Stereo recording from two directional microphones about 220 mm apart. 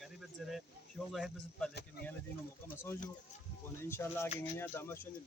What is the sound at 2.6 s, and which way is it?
Speech, 10° left (ahead or behind).